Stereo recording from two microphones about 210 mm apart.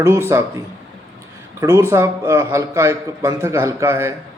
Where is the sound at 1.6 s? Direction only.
10° right (ahead or behind).